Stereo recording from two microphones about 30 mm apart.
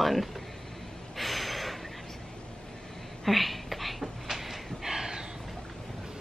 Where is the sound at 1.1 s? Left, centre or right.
Centre.